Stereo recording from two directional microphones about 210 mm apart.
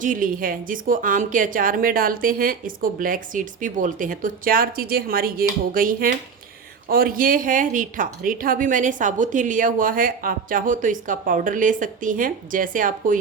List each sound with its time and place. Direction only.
0.0 s a woman's voice: 40° right (ahead or behind)